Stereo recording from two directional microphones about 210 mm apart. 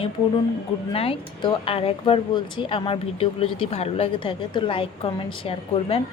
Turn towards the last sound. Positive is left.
turn(degrees=25)  # may be behind; listen again after turning